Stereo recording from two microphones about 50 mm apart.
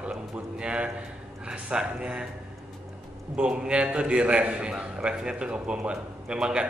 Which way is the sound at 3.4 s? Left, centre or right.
Right.